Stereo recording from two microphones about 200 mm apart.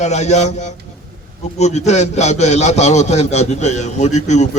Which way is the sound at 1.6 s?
35° left (ahead or behind).